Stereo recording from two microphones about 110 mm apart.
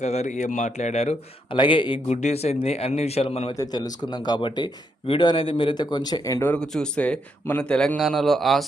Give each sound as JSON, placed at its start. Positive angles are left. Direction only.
{"t": 0.0, "sound": "a man's voice", "side_deg": 90}
{"t": 1.5, "sound": "a man's voice", "side_deg": 50}
{"t": 2.0, "sound": "a man's voice", "side_deg": 75}
{"t": 3.5, "sound": "a man's voice", "side_deg": 35}
{"t": 6.6, "sound": "a man's voice", "side_deg": 5}